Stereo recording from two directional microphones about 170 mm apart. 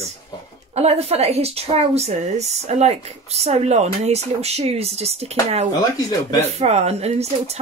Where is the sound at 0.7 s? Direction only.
35° right (ahead or behind).